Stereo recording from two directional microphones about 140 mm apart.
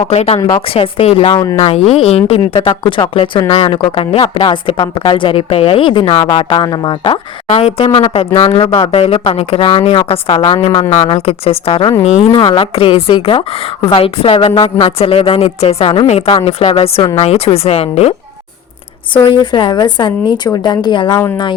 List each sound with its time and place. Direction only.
0.1 s a woman's voice: 50° left (ahead or behind)
0.3 s speech: 25° left (ahead or behind)
0.7 s a woman's voice: 40° left (ahead or behind)
19.1 s a woman's voice: 35° left (ahead or behind)